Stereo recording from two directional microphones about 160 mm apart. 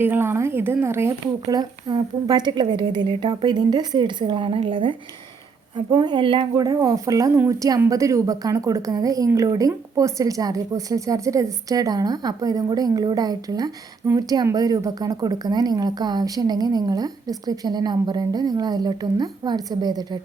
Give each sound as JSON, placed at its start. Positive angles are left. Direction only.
{"t": 0.0, "sound": "speech", "side_deg": -15}